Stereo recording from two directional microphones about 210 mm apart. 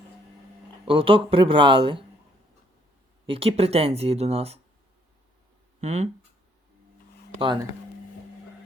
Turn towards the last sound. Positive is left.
turn(degrees=-20)  # may be behind; listen again after turning